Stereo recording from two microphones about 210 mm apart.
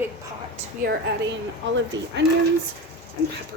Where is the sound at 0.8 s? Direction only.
60° right (ahead or behind).